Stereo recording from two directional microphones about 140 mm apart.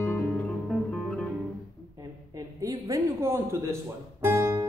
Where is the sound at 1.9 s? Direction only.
25° right (ahead or behind).